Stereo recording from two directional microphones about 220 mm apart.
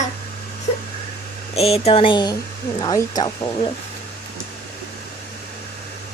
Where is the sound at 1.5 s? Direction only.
30° left (ahead or behind).